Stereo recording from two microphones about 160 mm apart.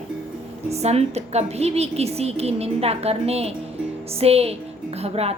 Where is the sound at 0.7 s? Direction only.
40° right (ahead or behind).